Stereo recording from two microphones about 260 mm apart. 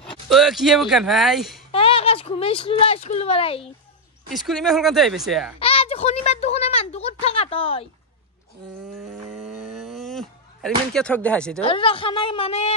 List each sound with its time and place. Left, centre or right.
0.0 s speech: centre
1.7 s speech: left
4.3 s speech: centre
5.6 s a sound: left
9.0 s a sound: centre
10.9 s speech: centre
11.6 s a woman's voice: left